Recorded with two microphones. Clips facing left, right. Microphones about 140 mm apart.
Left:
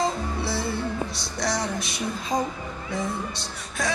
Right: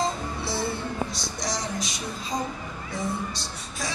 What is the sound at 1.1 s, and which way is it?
Music, 60° left (ahead or behind).